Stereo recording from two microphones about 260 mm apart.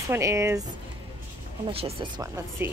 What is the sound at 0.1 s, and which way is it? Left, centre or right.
Speech, centre.